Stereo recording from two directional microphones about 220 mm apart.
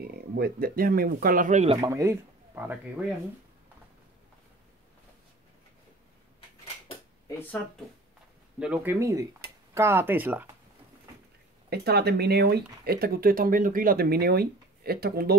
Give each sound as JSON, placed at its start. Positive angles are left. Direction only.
{"t": 0.1, "sound": "speech", "side_deg": -45}
{"t": 1.8, "sound": "speech", "side_deg": -15}
{"t": 8.5, "sound": "speech", "side_deg": -5}
{"t": 11.7, "sound": "speech", "side_deg": -45}